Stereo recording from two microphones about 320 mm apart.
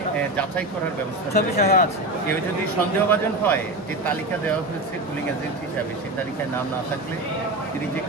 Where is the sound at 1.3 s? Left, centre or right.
Left.